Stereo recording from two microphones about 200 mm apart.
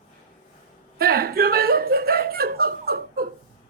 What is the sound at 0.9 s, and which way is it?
Chuckle, 50° right (ahead or behind).